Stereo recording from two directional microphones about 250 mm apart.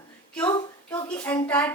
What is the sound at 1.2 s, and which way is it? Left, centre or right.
Speech, centre.